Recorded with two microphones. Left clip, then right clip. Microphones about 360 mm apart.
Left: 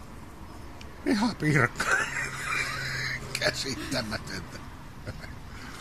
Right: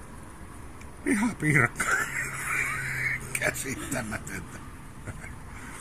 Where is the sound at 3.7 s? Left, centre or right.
Centre.